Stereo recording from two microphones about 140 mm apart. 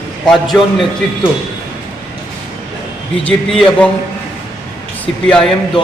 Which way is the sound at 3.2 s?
5° left (ahead or behind).